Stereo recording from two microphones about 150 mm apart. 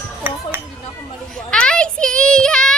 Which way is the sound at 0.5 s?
15° right (ahead or behind).